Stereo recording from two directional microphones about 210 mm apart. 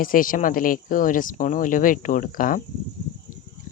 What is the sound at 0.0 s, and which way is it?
Speech, 40° left (ahead or behind).